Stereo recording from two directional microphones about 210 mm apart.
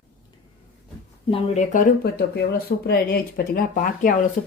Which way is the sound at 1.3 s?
35° left (ahead or behind).